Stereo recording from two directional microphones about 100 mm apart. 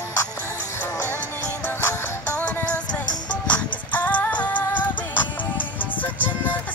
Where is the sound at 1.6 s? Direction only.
20° left (ahead or behind).